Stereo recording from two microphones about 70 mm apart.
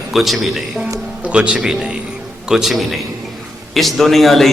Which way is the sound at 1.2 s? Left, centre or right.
Centre.